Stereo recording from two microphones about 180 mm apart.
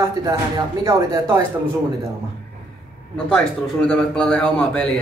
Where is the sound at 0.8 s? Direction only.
15° right (ahead or behind).